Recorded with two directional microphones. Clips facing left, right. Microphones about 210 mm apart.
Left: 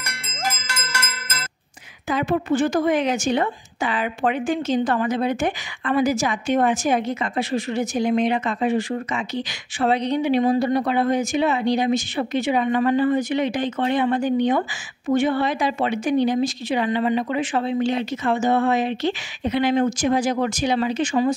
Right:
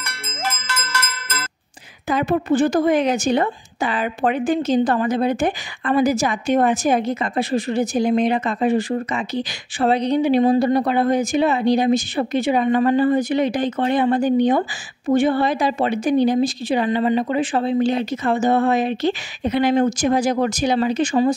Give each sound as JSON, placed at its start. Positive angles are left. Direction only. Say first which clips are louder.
{"t": 0.6, "sound": "cowbell", "louder": "right 3 dB", "side_deg": -55}
{"t": 2.0, "sound": "speech", "louder": "right 2 dB", "side_deg": -40}